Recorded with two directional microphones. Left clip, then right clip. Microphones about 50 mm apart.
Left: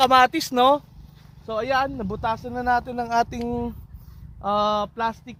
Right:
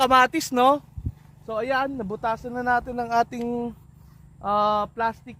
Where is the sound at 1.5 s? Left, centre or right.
Right.